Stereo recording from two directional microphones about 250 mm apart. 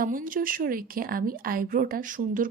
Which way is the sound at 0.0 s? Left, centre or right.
Right.